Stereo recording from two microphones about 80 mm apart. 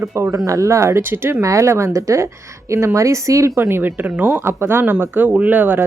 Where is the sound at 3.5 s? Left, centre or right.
Right.